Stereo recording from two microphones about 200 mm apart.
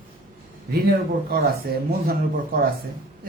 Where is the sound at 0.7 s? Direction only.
50° right (ahead or behind).